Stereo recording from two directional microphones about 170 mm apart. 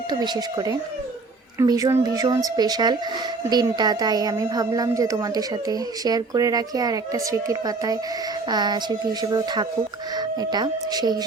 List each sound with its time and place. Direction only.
0.1 s a woman's voice: 25° right (ahead or behind)